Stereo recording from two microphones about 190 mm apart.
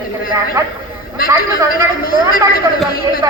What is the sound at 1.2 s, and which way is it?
Speech, 50° left (ahead or behind).